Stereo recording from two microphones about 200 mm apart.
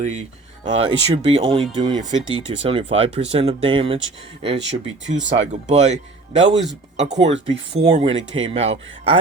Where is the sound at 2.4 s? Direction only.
25° right (ahead or behind).